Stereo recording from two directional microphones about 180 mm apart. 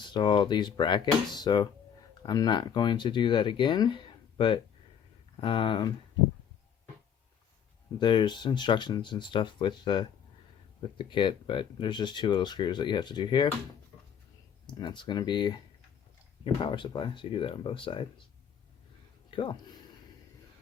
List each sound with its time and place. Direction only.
0.0 s speech: 25° left (ahead or behind)
7.9 s speech: 25° left (ahead or behind)
14.7 s speech: 25° left (ahead or behind)